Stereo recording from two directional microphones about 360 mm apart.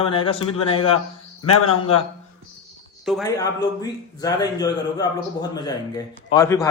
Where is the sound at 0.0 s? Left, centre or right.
Centre.